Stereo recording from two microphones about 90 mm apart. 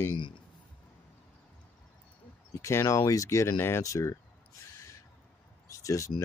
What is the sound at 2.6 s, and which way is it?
A man's voice, 35° left (ahead or behind).